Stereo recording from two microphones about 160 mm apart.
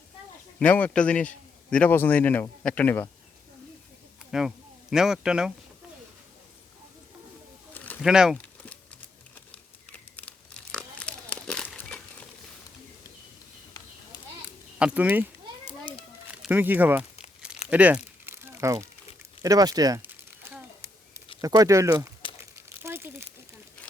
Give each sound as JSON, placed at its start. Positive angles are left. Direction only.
{"t": 0.6, "sound": "speech", "side_deg": 10}
{"t": 4.3, "sound": "speech", "side_deg": -5}
{"t": 8.0, "sound": "speech", "side_deg": -5}
{"t": 8.4, "sound": "crumpling", "side_deg": 10}
{"t": 10.2, "sound": "crumpling", "side_deg": 10}
{"t": 14.8, "sound": "speech", "side_deg": -10}
{"t": 16.3, "sound": "speech", "side_deg": -10}
{"t": 17.7, "sound": "crumpling", "side_deg": -10}
{"t": 19.4, "sound": "speech", "side_deg": -25}
{"t": 20.1, "sound": "crumpling", "side_deg": -10}
{"t": 21.4, "sound": "speech", "side_deg": -20}
{"t": 22.8, "sound": "crumpling", "side_deg": -15}